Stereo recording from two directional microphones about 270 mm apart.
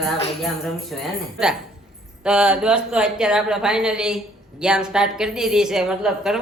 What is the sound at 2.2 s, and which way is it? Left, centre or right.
A woman's voice, centre.